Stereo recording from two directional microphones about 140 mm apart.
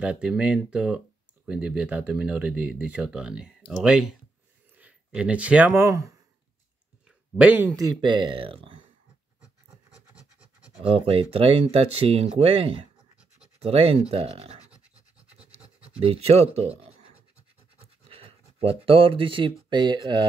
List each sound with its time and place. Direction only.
0.0 s speech: 5° right (ahead or behind)
5.9 s speech: 20° right (ahead or behind)
7.1 s a sound: 10° right (ahead or behind)
7.7 s speech: 25° right (ahead or behind)
10.8 s speech: 40° right (ahead or behind)
16.0 s speech: 45° right (ahead or behind)
18.0 s a sound: 45° right (ahead or behind)
19.7 s speech: 35° right (ahead or behind)